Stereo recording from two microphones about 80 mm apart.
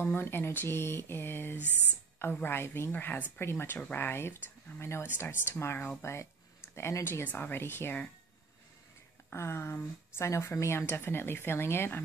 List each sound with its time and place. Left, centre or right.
0.0 s speech: left
7.3 s speech: left
9.3 s speech: left